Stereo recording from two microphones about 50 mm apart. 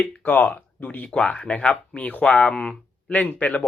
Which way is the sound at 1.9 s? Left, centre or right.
Left.